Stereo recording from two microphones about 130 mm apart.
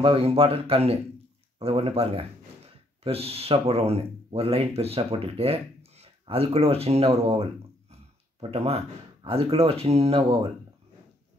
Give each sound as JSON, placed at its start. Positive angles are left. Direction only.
{"t": 0.0, "sound": "a man's voice", "side_deg": -45}